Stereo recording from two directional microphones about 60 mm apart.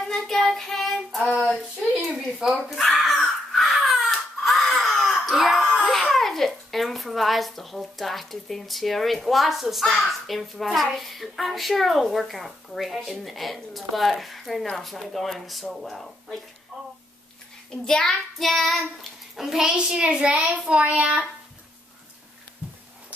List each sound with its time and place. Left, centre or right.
0.1 s child singing: centre
2.3 s a child's voice: centre
3.5 s a sound: centre
5.8 s a child's voice: centre
17.8 s a child's voice: centre
19.6 s a child's voice: centre